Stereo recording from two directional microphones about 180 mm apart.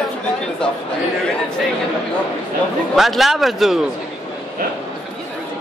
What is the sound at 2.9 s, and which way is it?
Speech, centre (ahead or behind).